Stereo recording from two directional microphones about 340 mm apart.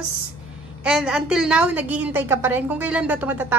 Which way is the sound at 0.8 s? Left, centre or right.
Centre.